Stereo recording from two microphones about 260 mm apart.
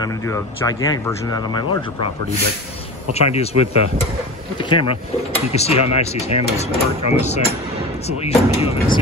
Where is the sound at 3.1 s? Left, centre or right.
Left.